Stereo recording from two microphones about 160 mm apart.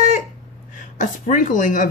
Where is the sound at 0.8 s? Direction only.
50° left (ahead or behind).